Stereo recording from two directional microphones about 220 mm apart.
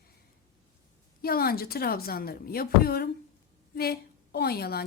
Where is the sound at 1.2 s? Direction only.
45° left (ahead or behind).